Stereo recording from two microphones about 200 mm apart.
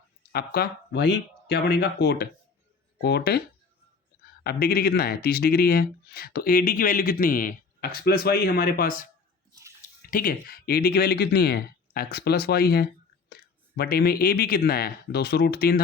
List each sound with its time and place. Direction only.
0.3 s speech: 50° left (ahead or behind)
4.4 s speech: 50° left (ahead or behind)
9.5 s drip: 15° right (ahead or behind)
10.0 s speech: 45° left (ahead or behind)